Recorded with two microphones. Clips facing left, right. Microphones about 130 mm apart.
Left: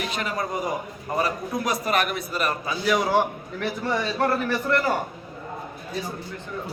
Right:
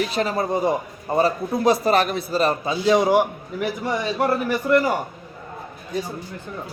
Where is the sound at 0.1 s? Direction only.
30° right (ahead or behind).